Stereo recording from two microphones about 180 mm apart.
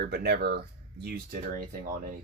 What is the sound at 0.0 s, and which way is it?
Speech, 60° right (ahead or behind).